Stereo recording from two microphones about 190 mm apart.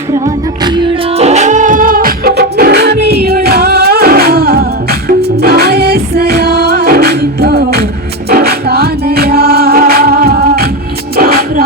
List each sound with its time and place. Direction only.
0.6 s music: 25° right (ahead or behind); by 11.6 s 50° right (ahead or behind)